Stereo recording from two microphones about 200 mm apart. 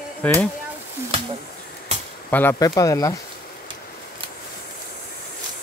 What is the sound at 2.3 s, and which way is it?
Speech, 10° left (ahead or behind).